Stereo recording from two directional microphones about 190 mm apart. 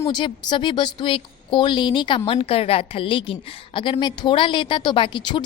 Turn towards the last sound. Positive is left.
turn(degrees=25)  # may be behind; listen again after turning